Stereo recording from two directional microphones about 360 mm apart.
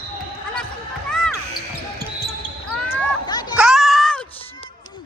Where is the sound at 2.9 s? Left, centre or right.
Centre.